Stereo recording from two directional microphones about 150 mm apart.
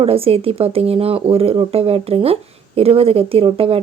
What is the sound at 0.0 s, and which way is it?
Speech, 40° right (ahead or behind).